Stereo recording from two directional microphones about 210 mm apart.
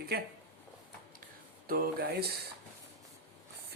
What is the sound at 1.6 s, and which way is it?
Speech, 45° right (ahead or behind).